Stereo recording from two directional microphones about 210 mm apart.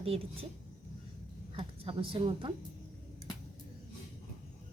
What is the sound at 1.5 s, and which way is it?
A woman's voice, 25° right (ahead or behind).